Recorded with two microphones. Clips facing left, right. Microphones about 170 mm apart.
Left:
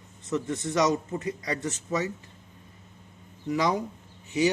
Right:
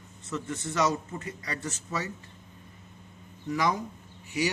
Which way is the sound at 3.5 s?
15° left (ahead or behind).